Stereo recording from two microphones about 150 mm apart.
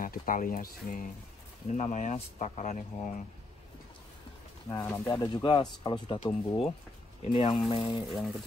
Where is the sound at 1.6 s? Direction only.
50° left (ahead or behind).